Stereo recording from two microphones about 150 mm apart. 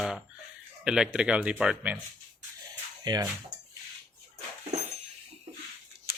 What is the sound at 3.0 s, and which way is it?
Speech, 25° right (ahead or behind).